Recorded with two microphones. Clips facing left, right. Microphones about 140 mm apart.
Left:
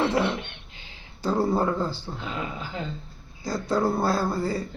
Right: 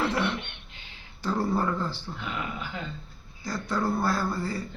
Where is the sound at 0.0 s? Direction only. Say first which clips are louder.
Left 4 dB; 25° left (ahead or behind).